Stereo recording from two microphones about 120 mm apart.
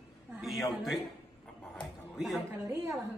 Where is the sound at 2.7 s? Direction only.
25° right (ahead or behind).